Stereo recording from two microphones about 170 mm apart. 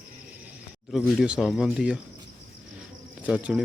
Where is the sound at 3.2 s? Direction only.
10° right (ahead or behind).